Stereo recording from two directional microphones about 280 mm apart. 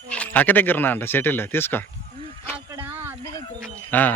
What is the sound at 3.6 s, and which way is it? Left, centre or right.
Speech, centre.